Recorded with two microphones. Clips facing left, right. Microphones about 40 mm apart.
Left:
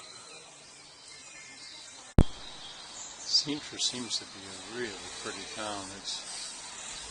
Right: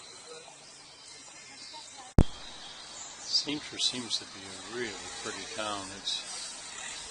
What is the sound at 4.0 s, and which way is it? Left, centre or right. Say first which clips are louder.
Speech: right 1 dB; centre.